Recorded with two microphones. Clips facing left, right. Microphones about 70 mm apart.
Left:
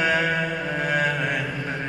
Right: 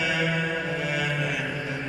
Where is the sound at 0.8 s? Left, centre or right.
Left.